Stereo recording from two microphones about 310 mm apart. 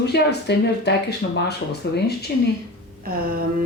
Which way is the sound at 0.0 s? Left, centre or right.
Left.